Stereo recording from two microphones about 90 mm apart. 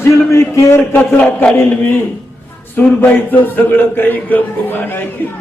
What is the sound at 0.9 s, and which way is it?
A man's voice, 20° left (ahead or behind).